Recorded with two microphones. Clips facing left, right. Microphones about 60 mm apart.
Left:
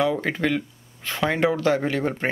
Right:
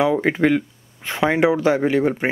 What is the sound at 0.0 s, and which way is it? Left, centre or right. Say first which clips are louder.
Speech: right 5 dB; centre.